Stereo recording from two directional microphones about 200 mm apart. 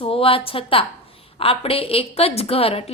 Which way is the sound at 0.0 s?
25° left (ahead or behind).